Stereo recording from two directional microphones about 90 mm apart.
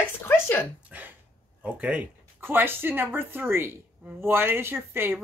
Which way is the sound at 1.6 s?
15° right (ahead or behind).